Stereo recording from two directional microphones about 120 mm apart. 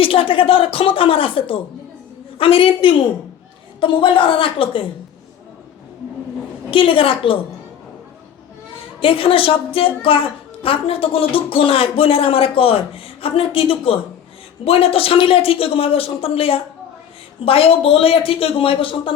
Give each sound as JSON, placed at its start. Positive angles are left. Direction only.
{"t": 0.0, "sound": "speech", "side_deg": 50}
{"t": 6.7, "sound": "speech", "side_deg": 45}
{"t": 9.0, "sound": "speech", "side_deg": 50}